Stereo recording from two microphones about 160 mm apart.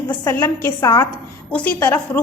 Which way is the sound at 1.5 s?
10° left (ahead or behind).